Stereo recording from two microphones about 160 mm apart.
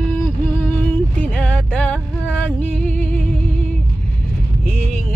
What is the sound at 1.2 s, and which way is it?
Music, 10° left (ahead or behind).